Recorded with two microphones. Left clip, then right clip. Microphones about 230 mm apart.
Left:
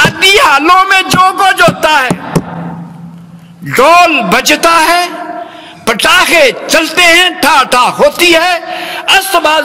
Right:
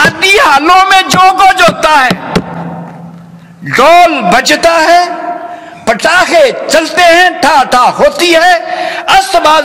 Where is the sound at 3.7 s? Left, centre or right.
Left.